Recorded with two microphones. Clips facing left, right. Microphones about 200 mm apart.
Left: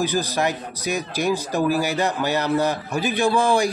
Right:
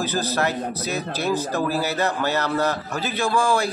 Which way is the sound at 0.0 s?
15° left (ahead or behind).